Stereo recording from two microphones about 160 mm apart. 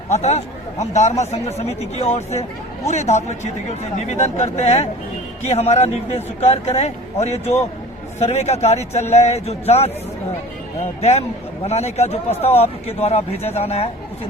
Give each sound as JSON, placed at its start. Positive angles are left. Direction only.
{"t": 0.1, "sound": "a man's voice", "side_deg": 45}
{"t": 11.0, "sound": "a man's voice", "side_deg": 40}